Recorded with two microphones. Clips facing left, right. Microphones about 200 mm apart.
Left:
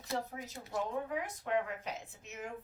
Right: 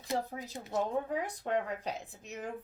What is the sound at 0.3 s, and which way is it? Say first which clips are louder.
Speech: right 4 dB; 30° right (ahead or behind).